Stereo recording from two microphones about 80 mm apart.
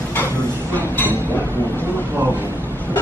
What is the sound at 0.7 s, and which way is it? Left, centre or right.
Speech, left.